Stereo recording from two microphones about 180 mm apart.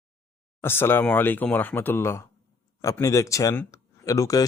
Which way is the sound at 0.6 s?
10° left (ahead or behind).